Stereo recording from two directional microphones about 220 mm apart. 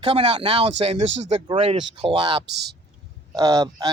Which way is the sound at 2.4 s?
50° right (ahead or behind).